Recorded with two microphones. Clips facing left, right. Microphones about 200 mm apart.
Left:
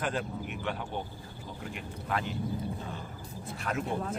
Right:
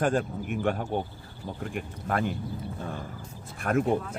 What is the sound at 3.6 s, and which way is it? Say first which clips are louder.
Speech: right 9 dB; 55° right (ahead or behind).